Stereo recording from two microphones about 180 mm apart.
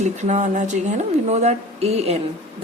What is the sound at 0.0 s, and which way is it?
A woman's voice, 40° right (ahead or behind).